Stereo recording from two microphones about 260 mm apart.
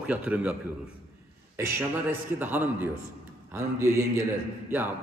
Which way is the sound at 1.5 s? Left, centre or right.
Centre.